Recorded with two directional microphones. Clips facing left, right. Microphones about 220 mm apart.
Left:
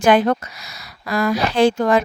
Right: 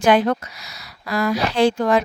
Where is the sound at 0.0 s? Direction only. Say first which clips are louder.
Left 1 dB; 50° left (ahead or behind).